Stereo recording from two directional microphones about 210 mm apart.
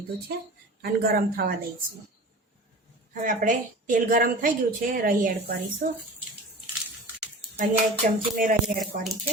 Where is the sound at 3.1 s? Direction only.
40° right (ahead or behind).